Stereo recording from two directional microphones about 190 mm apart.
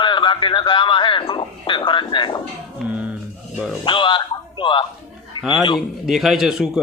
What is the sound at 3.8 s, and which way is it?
Speech, 25° left (ahead or behind).